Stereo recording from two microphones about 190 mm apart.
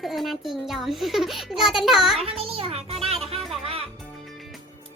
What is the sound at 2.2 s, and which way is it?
A child's voice, 30° right (ahead or behind).